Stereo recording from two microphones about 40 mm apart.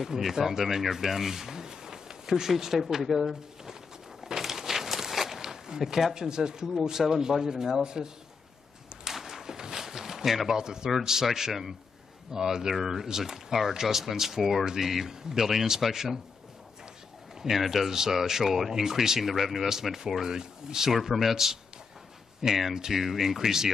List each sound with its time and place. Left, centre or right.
0.0 s speech: centre
4.2 s walk: centre
6.1 s speech: centre
9.0 s a sound: centre
11.0 s speech: centre
17.4 s speech: centre